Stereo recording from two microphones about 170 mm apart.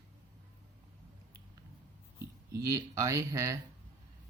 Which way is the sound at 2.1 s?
20° right (ahead or behind).